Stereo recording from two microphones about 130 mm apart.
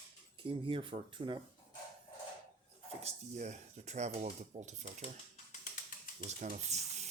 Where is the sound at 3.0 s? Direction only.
60° right (ahead or behind).